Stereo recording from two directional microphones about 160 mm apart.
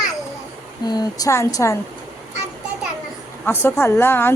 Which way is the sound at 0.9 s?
25° left (ahead or behind).